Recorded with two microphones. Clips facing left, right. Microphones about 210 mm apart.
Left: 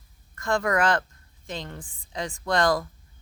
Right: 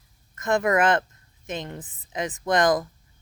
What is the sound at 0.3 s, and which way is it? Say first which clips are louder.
Speech: right 3 dB; 20° right (ahead or behind).